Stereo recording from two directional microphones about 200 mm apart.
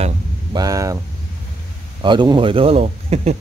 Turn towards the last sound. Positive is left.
turn(degrees=-30)  # may be behind; listen again after turning